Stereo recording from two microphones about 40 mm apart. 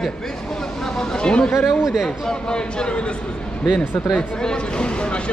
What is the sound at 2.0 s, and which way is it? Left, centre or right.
Speech, left.